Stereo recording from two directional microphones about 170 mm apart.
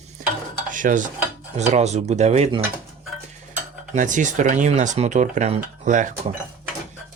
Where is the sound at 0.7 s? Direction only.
50° right (ahead or behind).